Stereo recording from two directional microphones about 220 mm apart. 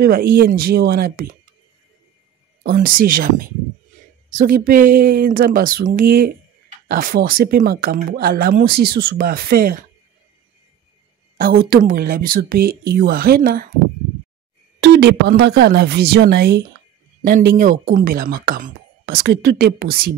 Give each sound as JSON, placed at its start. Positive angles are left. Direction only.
{"t": 0.0, "sound": "speech", "side_deg": -45}
{"t": 2.6, "sound": "speech", "side_deg": -40}
{"t": 11.3, "sound": "speech", "side_deg": -40}
{"t": 14.8, "sound": "speech", "side_deg": -45}